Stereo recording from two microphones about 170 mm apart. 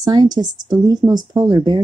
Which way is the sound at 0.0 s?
25° right (ahead or behind).